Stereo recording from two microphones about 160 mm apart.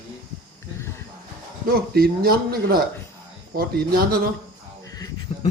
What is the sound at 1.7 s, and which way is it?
A man's voice, 70° right (ahead or behind).